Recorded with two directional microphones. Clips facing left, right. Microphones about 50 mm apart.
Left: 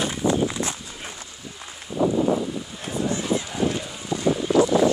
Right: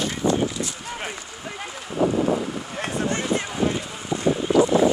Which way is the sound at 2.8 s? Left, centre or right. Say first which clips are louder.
Right 2 dB; right.